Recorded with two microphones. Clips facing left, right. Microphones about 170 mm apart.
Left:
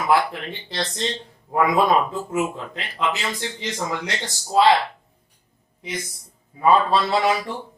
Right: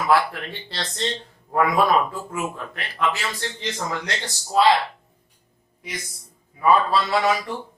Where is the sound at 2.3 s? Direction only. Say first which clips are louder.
Left 5 dB; 20° left (ahead or behind).